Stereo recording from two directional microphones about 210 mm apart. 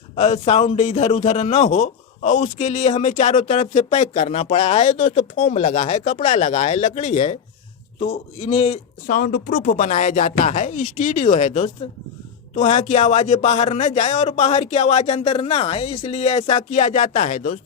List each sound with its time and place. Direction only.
0.2 s a man's voice: 30° left (ahead or behind)
9.0 s a man's voice: 45° left (ahead or behind)